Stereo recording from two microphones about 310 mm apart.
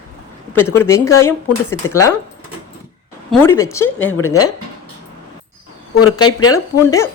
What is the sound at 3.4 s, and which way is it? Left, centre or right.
A woman's voice, centre.